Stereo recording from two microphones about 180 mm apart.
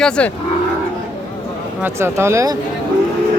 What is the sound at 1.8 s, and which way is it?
Speech, 15° right (ahead or behind).